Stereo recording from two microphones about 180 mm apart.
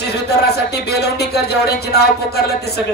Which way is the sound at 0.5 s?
65° left (ahead or behind).